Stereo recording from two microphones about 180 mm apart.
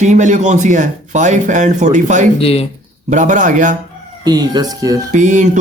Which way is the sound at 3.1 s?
45° right (ahead or behind).